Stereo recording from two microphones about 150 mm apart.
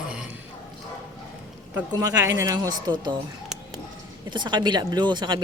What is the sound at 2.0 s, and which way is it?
Speech, 20° right (ahead or behind).